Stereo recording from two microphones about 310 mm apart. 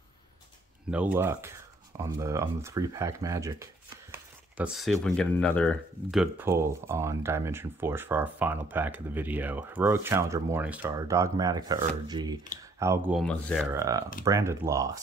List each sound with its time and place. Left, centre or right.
0.8 s speech: centre
13.7 s speech: centre